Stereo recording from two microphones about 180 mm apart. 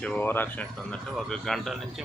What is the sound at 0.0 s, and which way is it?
Speech, 10° left (ahead or behind).